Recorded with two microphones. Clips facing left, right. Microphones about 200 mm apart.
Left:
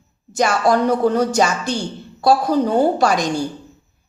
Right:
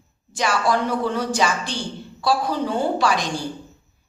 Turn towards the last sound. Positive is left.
turn(degrees=45)  # may be behind; listen again after turning